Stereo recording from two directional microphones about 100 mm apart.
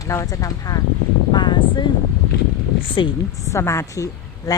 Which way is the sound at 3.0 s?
55° left (ahead or behind).